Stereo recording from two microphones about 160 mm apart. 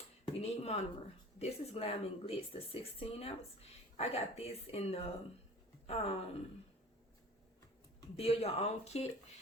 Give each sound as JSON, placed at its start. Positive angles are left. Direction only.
{"t": 0.3, "sound": "a sound", "side_deg": 40}
{"t": 1.4, "sound": "speech", "side_deg": 40}
{"t": 8.2, "sound": "speech", "side_deg": 40}